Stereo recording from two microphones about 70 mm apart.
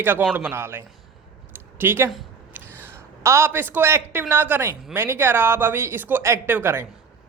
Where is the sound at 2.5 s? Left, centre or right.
Right.